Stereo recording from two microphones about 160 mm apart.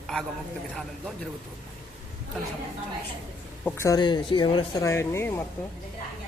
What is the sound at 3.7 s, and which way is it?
Speech, 20° left (ahead or behind).